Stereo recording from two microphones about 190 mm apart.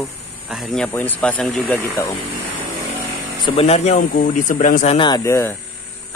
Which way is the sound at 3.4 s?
30° left (ahead or behind).